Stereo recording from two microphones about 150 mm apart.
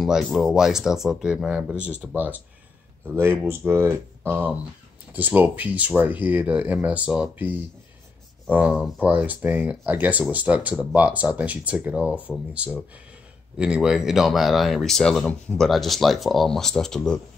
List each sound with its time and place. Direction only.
0.0 s speech: centre (ahead or behind)